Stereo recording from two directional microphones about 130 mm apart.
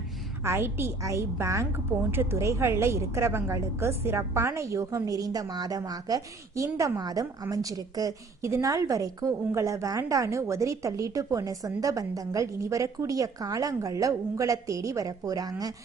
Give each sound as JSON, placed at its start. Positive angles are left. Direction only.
{"t": 0.4, "sound": "a woman's voice", "side_deg": -20}